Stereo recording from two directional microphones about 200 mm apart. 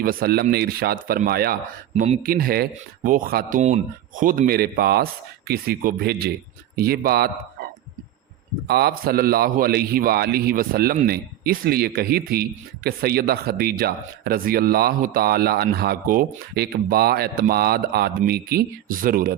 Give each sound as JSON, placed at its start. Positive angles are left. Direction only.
{"t": 0.0, "sound": "a man's voice", "side_deg": -45}
{"t": 8.6, "sound": "a man's voice", "side_deg": -55}